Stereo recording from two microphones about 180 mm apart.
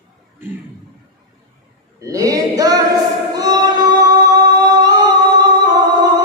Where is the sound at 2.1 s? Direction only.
20° right (ahead or behind).